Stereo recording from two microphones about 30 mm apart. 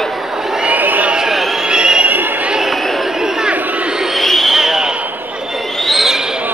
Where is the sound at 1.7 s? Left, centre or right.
Right.